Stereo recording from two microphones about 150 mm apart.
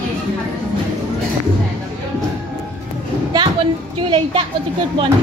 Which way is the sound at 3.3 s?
35° right (ahead or behind).